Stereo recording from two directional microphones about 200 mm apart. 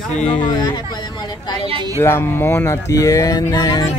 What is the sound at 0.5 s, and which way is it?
Speech, 20° left (ahead or behind).